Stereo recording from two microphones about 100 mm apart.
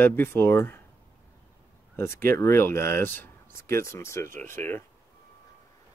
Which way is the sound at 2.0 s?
25° left (ahead or behind).